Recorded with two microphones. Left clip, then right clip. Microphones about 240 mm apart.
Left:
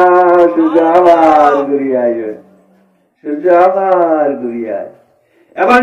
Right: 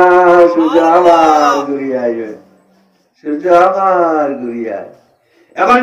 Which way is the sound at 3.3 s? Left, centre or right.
Right.